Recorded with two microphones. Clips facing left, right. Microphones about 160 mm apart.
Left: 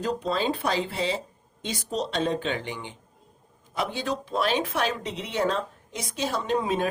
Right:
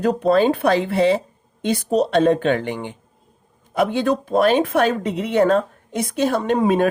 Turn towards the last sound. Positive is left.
turn(degrees=-60)  # may be behind; listen again after turning